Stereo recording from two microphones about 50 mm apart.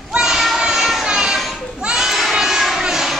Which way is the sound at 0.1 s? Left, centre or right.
Centre.